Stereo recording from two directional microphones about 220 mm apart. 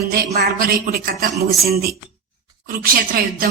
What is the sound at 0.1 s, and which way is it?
Speech, 45° right (ahead or behind).